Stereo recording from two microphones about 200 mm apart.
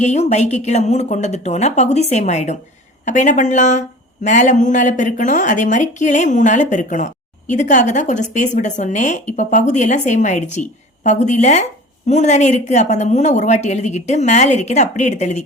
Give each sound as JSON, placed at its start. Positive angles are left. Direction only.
{"t": 0.0, "sound": "speech", "side_deg": 35}